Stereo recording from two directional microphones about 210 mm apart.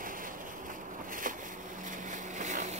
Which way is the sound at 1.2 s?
40° right (ahead or behind).